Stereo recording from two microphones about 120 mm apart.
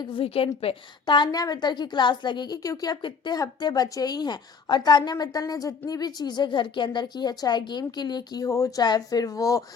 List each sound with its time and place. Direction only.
0.0 s a woman's voice: 45° left (ahead or behind); by 9.6 s 25° left (ahead or behind)